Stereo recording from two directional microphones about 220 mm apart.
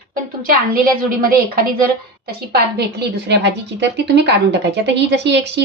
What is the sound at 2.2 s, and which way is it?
A woman's voice, 45° right (ahead or behind).